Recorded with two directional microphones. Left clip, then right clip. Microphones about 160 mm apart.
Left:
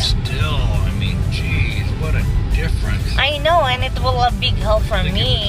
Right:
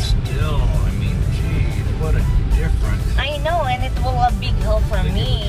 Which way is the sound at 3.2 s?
5° left (ahead or behind).